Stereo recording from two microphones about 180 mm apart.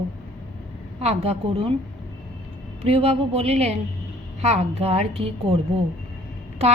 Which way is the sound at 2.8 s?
35° right (ahead or behind).